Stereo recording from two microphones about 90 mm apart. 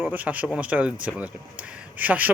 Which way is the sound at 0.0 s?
20° right (ahead or behind).